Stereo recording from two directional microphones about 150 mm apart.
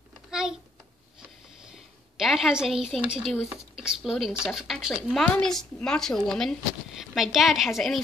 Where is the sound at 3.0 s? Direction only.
5° right (ahead or behind).